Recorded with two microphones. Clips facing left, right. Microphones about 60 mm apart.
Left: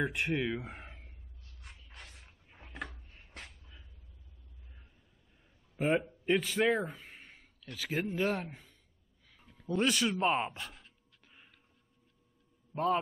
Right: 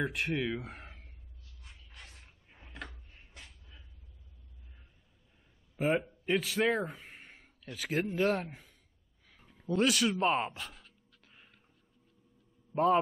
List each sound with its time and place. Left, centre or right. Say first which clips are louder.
0.0 s speech: left 1 dB; centre
1.4 s a sound: left 2 dB; left
1.8 s a sound: right 1 dB; centre
5.8 s gasp: even; centre
7.9 s a man's voice: right 3 dB; centre
10.6 s speech: even; left
11.2 s music: even; centre
12.7 s a man's voice: right 4 dB; centre